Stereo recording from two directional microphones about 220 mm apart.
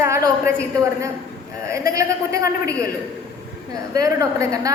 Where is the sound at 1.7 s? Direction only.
15° right (ahead or behind).